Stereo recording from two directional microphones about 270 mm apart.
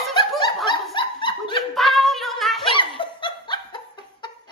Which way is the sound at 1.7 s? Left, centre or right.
Centre.